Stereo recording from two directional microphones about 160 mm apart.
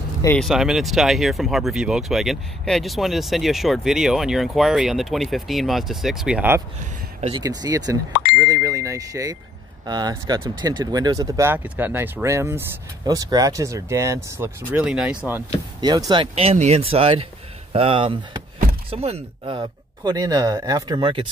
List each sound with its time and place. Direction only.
0.4 s speech: centre (ahead or behind)
7.2 s speech: 40° right (ahead or behind)
7.4 s speech: 25° right (ahead or behind)
8.4 s a sound: 20° right (ahead or behind)
9.8 s speech: 25° right (ahead or behind); by 15.4 s 10° right (ahead or behind)
15.8 s speech: 25° right (ahead or behind)